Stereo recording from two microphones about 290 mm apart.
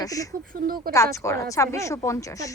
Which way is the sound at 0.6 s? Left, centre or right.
Right.